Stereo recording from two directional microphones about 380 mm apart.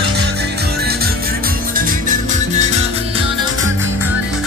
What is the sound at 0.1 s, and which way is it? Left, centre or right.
Music, right.